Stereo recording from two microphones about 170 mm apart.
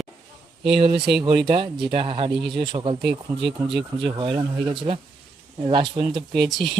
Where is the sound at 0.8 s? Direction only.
30° right (ahead or behind).